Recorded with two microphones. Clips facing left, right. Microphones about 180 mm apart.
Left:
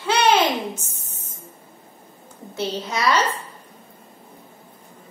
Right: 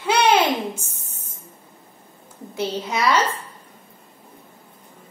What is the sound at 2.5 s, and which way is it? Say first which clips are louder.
Speech: right 1 dB; 10° right (ahead or behind).